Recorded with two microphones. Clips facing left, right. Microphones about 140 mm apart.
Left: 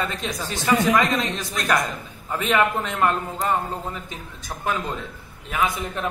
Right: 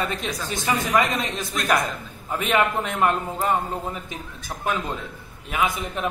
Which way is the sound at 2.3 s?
10° right (ahead or behind).